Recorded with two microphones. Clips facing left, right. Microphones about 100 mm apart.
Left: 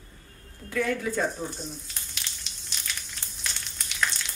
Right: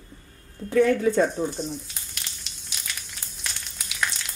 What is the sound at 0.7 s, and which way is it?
Speech, 35° right (ahead or behind).